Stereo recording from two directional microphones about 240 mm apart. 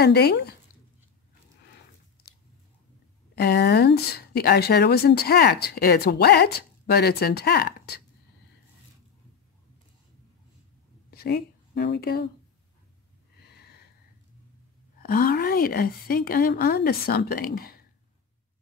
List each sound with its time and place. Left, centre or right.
0.0 s speech: left
3.3 s speech: left
11.1 s speech: left
15.0 s speech: left